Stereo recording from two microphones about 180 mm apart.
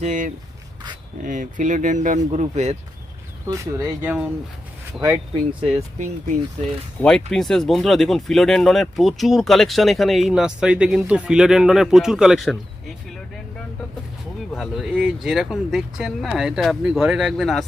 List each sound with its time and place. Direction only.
0.0 s speech: 45° right (ahead or behind)
3.4 s speech: 20° right (ahead or behind)
5.3 s speech: 30° right (ahead or behind)
7.0 s speech: 5° left (ahead or behind)
14.5 s speech: centre (ahead or behind)